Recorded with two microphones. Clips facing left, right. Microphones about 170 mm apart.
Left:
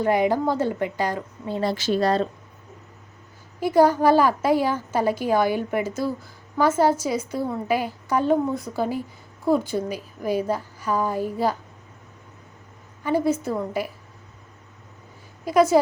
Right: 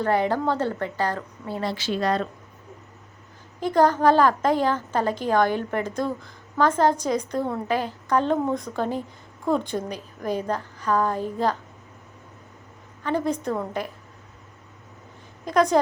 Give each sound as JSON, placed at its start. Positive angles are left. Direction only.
{"t": 0.0, "sound": "a woman's voice", "side_deg": 15}
{"t": 1.6, "sound": "speech", "side_deg": 45}
{"t": 3.6, "sound": "a woman's voice", "side_deg": 10}
{"t": 13.0, "sound": "a woman's voice", "side_deg": 10}
{"t": 15.4, "sound": "a woman's voice", "side_deg": 5}